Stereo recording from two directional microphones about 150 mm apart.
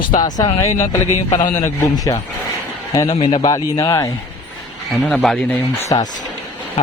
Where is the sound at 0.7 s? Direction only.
50° left (ahead or behind).